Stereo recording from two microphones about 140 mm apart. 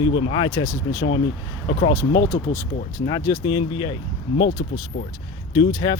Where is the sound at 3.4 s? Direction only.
35° left (ahead or behind).